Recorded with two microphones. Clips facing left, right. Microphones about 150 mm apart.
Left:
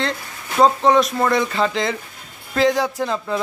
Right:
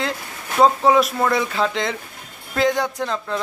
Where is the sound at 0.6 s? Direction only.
5° right (ahead or behind).